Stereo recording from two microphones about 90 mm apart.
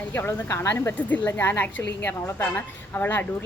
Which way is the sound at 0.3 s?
30° left (ahead or behind).